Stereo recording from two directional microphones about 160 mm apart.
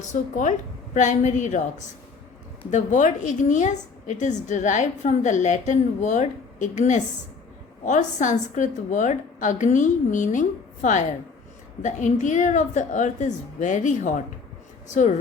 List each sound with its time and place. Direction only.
0.1 s a woman's voice: 50° left (ahead or behind)
2.6 s a woman's voice: 50° left (ahead or behind)